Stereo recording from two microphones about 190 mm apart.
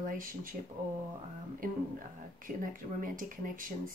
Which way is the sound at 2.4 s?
45° right (ahead or behind).